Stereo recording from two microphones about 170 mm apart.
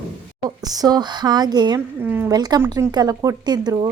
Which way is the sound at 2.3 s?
25° right (ahead or behind).